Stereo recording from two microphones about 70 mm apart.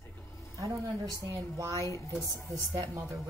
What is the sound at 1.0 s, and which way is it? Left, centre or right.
Speech, right.